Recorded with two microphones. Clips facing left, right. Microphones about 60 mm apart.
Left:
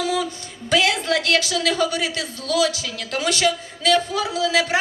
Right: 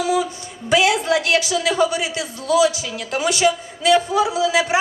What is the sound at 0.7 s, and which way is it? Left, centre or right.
Speech, centre.